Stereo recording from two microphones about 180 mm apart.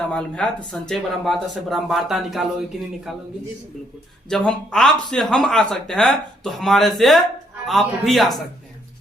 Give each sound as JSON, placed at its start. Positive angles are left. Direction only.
{"t": 0.1, "sound": "speech", "side_deg": 5}
{"t": 4.3, "sound": "speech", "side_deg": 5}